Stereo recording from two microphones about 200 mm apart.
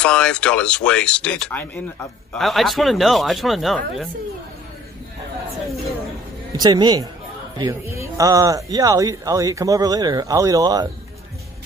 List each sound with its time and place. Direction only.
0.0 s speech: 5° left (ahead or behind)
6.5 s a man's voice: 20° right (ahead or behind)